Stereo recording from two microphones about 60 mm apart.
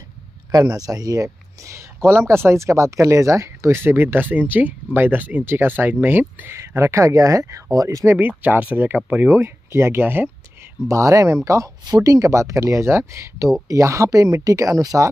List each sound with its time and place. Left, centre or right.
0.5 s speech: right
2.0 s speech: right
3.8 s speech: right
6.7 s speech: right
7.7 s speech: right
8.2 s speech: right
9.3 s speech: right
10.9 s speech: right